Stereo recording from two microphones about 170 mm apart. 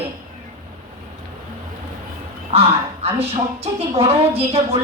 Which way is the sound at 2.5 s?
35° right (ahead or behind).